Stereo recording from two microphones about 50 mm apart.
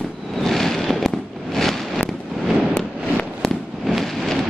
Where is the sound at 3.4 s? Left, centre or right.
Centre.